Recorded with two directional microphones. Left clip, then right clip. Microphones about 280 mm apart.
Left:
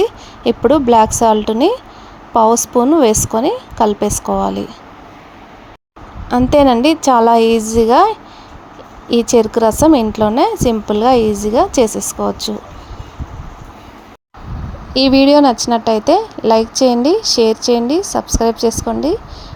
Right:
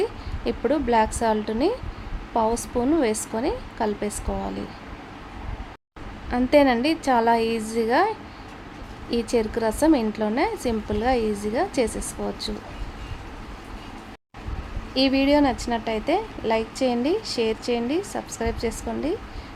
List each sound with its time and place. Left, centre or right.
0.0 s a woman's voice: left
6.3 s a woman's voice: left
14.9 s a woman's voice: left